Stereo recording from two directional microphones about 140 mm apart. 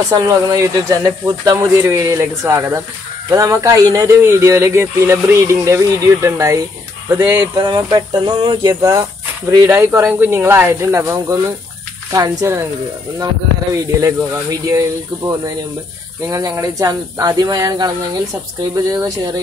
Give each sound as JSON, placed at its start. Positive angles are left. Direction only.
{"t": 0.1, "sound": "speech", "side_deg": -25}
{"t": 7.6, "sound": "speech", "side_deg": -30}
{"t": 14.0, "sound": "speech", "side_deg": -20}